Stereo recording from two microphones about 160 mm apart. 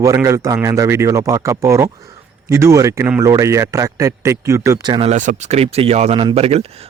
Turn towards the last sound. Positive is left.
turn(degrees=-40)  # may be behind; listen again after turning